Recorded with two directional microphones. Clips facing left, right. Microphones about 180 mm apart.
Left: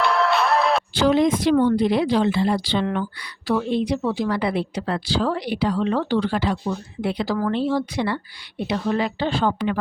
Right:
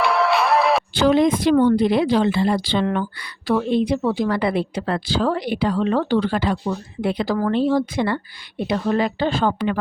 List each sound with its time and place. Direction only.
0.0 s music: centre (ahead or behind)
0.9 s a woman's voice: 55° right (ahead or behind)